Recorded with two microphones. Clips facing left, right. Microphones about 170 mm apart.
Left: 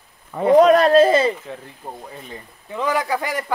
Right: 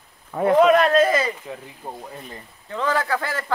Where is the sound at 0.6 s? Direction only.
35° left (ahead or behind).